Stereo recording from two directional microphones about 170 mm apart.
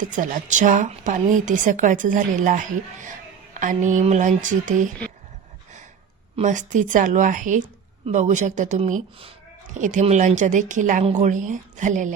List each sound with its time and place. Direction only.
0.0 s a woman's voice: 50° right (ahead or behind)
6.3 s a woman's voice: 45° right (ahead or behind)